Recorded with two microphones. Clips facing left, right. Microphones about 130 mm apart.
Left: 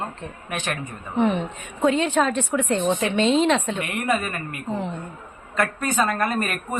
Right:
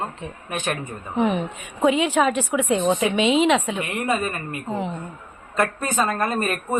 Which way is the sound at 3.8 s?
25° right (ahead or behind).